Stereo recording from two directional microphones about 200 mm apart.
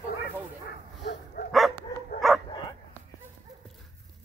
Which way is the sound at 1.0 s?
60° left (ahead or behind).